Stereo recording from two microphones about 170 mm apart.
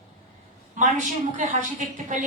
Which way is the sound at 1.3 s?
45° right (ahead or behind).